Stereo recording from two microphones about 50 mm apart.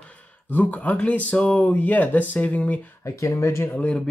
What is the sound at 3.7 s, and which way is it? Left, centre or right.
Speech, left.